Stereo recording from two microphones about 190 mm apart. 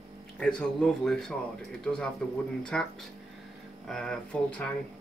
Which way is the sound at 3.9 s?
5° left (ahead or behind).